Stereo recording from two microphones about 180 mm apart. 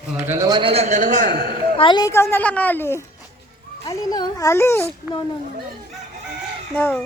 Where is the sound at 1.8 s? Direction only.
25° left (ahead or behind).